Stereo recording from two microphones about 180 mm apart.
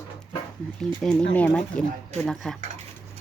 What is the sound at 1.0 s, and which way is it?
Speech, 5° left (ahead or behind).